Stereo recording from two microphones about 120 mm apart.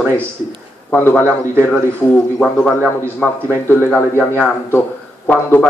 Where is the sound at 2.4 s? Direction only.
5° right (ahead or behind).